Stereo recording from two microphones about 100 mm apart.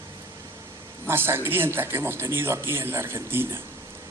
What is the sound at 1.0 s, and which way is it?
Speech, 25° right (ahead or behind).